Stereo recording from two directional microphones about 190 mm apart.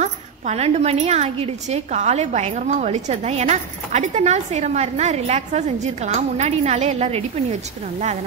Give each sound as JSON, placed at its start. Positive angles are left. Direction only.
{"t": 0.0, "sound": "a woman's voice", "side_deg": -35}